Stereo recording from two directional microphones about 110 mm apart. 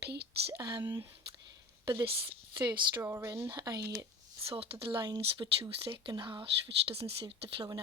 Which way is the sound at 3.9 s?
35° right (ahead or behind).